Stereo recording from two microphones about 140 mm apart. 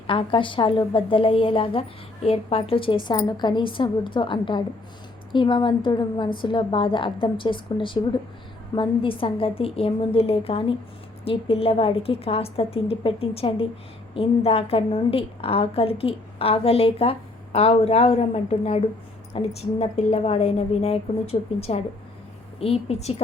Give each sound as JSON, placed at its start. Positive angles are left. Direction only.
{"t": 0.1, "sound": "a woman's voice", "side_deg": 40}